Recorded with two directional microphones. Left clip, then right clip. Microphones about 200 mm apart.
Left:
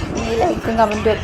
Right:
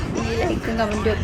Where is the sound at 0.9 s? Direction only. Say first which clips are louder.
Left 5 dB; 40° right (ahead or behind).